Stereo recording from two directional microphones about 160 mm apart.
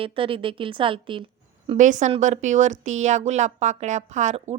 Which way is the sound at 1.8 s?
50° right (ahead or behind).